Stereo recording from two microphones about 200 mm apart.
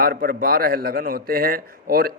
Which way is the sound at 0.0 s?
45° right (ahead or behind).